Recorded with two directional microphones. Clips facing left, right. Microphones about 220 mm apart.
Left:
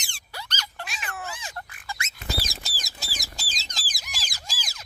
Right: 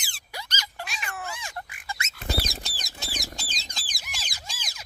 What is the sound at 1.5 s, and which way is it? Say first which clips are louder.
Pig: right 1 dB; 15° right (ahead or behind).